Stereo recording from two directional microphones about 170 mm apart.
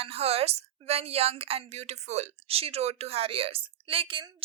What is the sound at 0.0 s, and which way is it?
A woman's voice, 35° right (ahead or behind).